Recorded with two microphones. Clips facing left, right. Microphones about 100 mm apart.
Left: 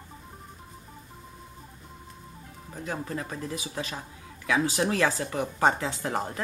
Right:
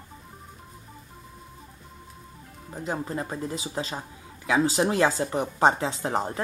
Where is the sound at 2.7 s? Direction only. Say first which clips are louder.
Right 3 dB; 25° right (ahead or behind).